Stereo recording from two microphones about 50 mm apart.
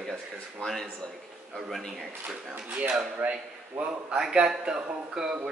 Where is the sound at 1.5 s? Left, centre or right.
Centre.